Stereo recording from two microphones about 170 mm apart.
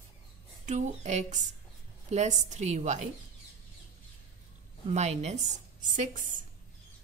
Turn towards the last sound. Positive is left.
turn(degrees=-50)  # may be behind; listen again after turning